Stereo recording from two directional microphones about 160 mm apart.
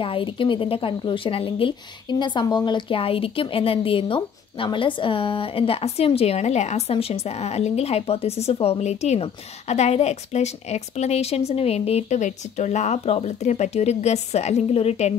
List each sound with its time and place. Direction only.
0.0 s a woman's voice: 35° left (ahead or behind)